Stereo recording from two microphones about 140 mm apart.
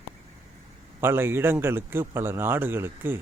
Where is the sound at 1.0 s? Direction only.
15° right (ahead or behind).